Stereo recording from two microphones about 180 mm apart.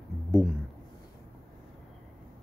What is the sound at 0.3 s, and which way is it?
Speech, centre (ahead or behind).